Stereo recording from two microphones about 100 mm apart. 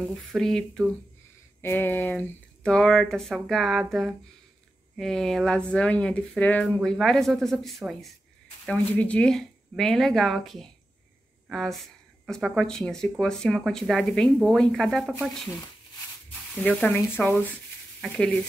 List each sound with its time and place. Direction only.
0.0 s speech: centre (ahead or behind)
1.6 s speech: 20° left (ahead or behind)
2.7 s speech: 5° left (ahead or behind)
4.9 s speech: 5° left (ahead or behind)
8.6 s speech: 10° left (ahead or behind)
16.5 s speech: 15° left (ahead or behind)
18.0 s speech: 10° left (ahead or behind)